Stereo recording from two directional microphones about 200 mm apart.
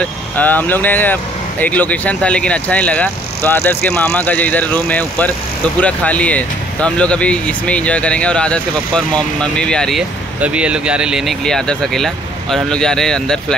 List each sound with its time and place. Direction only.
0.0 s speech: 10° left (ahead or behind)